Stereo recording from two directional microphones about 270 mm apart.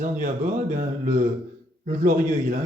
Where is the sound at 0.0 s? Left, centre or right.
Right.